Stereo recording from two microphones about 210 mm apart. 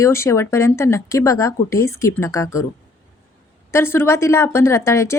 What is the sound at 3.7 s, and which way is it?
Speech, 10° left (ahead or behind).